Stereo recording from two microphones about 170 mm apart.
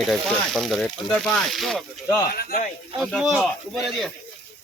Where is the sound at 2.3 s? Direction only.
65° left (ahead or behind).